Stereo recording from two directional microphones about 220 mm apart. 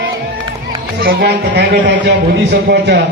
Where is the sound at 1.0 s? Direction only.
45° right (ahead or behind).